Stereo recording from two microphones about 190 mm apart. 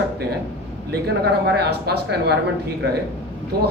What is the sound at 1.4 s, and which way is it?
Speech, 60° right (ahead or behind).